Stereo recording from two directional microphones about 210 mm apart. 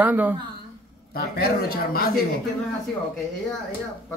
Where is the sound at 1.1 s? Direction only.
45° left (ahead or behind).